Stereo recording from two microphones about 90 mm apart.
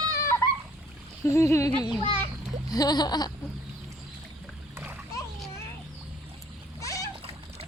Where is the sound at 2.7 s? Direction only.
45° left (ahead or behind).